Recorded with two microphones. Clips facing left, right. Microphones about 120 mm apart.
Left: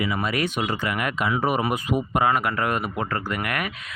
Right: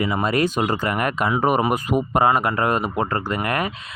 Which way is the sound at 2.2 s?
30° right (ahead or behind).